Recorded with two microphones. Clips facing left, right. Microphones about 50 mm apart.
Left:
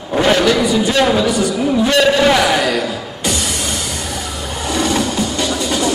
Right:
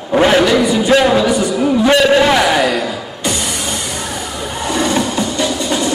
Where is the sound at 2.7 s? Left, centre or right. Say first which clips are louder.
Even; centre.